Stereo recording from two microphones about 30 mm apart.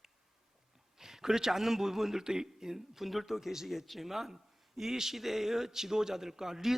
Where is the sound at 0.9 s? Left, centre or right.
Centre.